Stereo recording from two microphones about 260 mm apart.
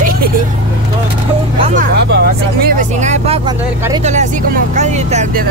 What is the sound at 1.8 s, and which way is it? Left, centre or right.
Vehicle, right.